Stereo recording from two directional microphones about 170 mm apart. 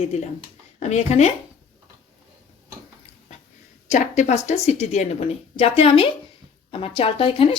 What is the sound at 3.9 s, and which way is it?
A woman's voice, 40° left (ahead or behind).